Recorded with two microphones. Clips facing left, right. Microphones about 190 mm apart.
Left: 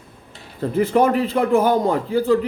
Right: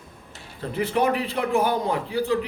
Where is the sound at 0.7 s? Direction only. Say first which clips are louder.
Left 6 dB; 45° left (ahead or behind).